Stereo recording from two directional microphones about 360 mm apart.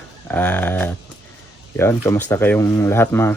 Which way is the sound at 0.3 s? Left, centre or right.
Centre.